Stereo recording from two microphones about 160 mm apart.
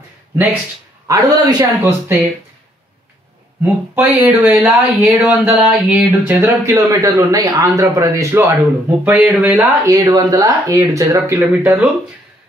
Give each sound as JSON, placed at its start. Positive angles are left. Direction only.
{"t": 1.0, "sound": "speech", "side_deg": -20}
{"t": 3.6, "sound": "speech", "side_deg": -10}
{"t": 9.8, "sound": "speech", "side_deg": -20}